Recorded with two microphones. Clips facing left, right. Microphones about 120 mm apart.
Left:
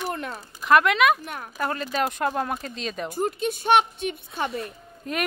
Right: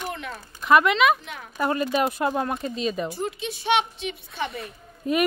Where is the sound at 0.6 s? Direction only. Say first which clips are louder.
Even; centre (ahead or behind).